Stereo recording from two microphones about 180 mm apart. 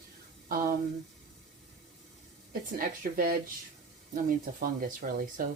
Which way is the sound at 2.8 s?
55° right (ahead or behind).